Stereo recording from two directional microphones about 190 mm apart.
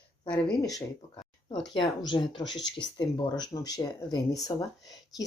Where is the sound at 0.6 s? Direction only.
20° left (ahead or behind).